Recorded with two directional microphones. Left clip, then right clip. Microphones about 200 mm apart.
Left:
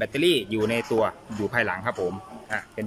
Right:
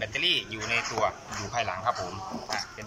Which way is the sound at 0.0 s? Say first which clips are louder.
Left 4 dB; 55° left (ahead or behind).